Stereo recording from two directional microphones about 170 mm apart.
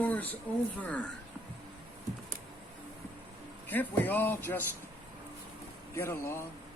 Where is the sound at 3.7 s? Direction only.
10° left (ahead or behind).